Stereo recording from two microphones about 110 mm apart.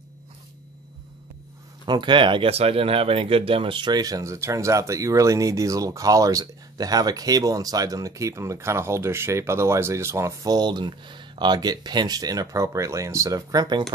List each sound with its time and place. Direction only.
1.9 s speech: 45° right (ahead or behind)
2.5 s speech: 65° right (ahead or behind); by 13.9 s 40° right (ahead or behind)